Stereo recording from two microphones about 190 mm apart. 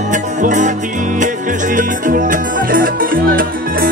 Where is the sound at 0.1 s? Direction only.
40° right (ahead or behind).